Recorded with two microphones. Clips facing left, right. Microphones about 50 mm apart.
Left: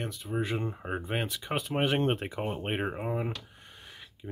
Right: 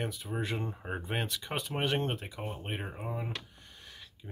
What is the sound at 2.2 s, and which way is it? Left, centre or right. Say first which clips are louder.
Speech: left 7 dB; left.